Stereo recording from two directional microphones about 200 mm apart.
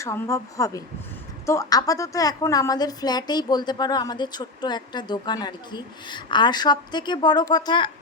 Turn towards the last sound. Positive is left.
turn(degrees=20)  # may be behind; listen again after turning